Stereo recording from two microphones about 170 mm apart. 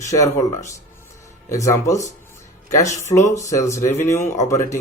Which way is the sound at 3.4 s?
20° left (ahead or behind).